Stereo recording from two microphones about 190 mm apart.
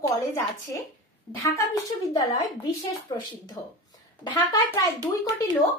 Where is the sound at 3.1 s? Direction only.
25° left (ahead or behind).